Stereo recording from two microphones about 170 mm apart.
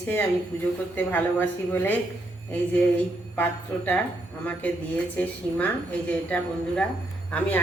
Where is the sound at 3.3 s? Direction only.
10° left (ahead or behind).